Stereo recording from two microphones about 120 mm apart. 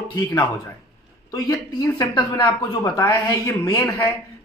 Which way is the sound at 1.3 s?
30° left (ahead or behind).